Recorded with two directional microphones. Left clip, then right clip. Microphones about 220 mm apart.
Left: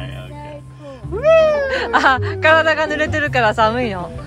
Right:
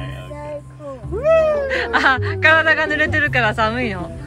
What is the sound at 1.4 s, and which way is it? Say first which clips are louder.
Speech: left 2 dB; 10° left (ahead or behind).